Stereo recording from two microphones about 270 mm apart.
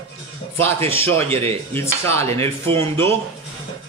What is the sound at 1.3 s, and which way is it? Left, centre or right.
Speech, right.